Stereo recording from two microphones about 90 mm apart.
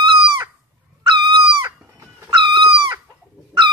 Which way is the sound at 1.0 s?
65° right (ahead or behind).